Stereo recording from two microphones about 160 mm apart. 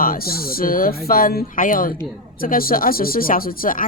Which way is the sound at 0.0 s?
65° left (ahead or behind).